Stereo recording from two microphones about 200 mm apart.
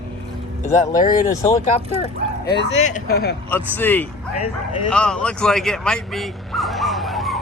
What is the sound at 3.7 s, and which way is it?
Speech, 10° left (ahead or behind).